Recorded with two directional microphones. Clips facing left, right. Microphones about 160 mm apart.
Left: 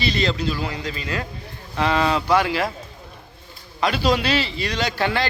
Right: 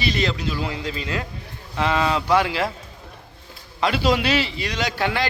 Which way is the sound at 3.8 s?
20° right (ahead or behind).